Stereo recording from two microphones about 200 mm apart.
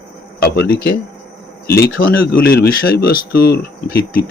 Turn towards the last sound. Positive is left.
turn(degrees=50)  # may be behind; listen again after turning